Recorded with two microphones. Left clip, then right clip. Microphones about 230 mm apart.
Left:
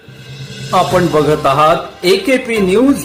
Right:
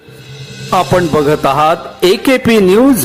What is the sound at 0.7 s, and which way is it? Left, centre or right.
Speech, right.